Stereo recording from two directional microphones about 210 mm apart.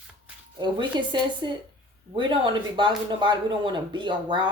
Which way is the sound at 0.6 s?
20° right (ahead or behind).